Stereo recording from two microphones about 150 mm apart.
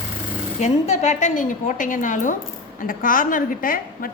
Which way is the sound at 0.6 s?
50° left (ahead or behind).